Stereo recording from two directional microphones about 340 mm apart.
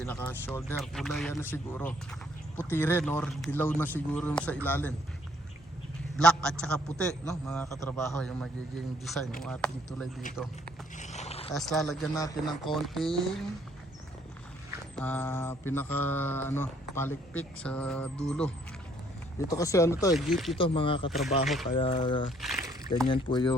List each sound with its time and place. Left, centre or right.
0.0 s speech: centre
6.1 s a man's voice: centre
10.9 s a sound: centre
11.5 s speech: centre
14.9 s a man's voice: centre
20.6 s a man's voice: centre
21.1 s speech: centre
21.8 s a man's voice: centre
22.4 s speech: centre
23.0 s a man's voice: centre